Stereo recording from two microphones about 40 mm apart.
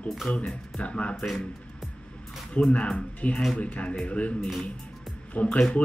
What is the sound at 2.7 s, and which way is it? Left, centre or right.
Speech, left.